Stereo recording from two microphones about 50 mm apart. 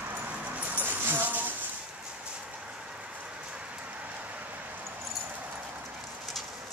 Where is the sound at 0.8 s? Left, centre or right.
Right.